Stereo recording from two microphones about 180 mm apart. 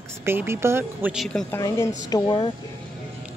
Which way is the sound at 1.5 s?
15° left (ahead or behind).